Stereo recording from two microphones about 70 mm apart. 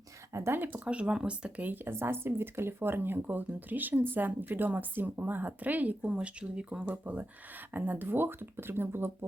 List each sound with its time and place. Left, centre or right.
0.3 s speech: right
0.9 s speech: centre; by 9.1 s right